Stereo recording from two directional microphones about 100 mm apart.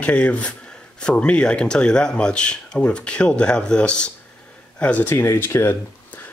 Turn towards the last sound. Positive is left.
turn(degrees=25)  # may be behind; listen again after turning